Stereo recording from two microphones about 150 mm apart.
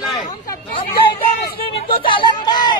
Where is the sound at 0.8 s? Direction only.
35° left (ahead or behind).